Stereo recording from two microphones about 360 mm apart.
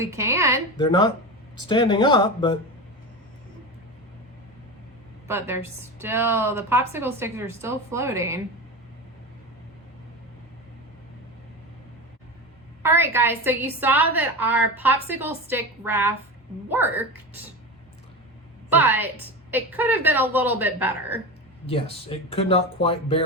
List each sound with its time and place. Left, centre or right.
0.0 s a woman's voice: centre
0.8 s speech: centre
5.3 s a woman's voice: centre
12.8 s a woman's voice: centre
18.7 s a woman's voice: centre
21.7 s speech: centre